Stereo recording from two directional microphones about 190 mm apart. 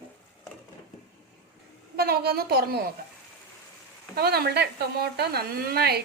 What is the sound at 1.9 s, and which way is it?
Speech, 55° right (ahead or behind).